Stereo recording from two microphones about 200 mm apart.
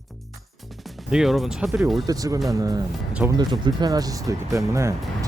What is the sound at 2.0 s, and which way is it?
Speech, 15° right (ahead or behind).